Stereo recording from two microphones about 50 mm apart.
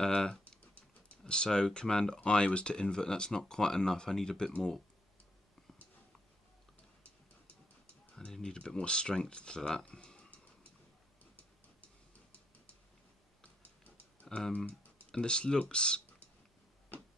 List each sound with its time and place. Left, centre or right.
0.0 s typing: centre
1.2 s speech: centre
8.4 s speech: centre
14.3 s speech: centre